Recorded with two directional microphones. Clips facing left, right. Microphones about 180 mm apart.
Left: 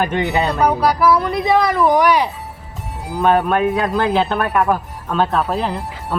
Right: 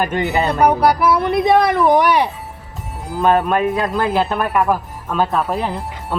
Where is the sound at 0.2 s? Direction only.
Centre (ahead or behind).